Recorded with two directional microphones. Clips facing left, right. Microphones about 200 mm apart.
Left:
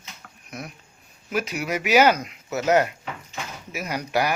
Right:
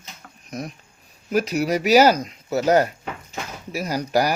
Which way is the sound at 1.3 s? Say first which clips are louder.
Right 6 dB; 40° right (ahead or behind).